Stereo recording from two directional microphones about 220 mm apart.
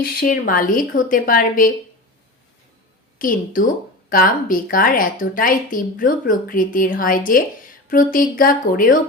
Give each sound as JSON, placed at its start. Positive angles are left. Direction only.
{"t": 0.0, "sound": "a woman's voice", "side_deg": 40}
{"t": 3.2, "sound": "a woman's voice", "side_deg": 40}